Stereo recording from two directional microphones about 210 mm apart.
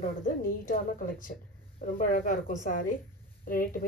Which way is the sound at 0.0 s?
40° left (ahead or behind).